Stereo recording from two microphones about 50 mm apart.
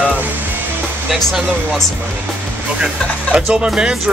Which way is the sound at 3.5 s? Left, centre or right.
Centre.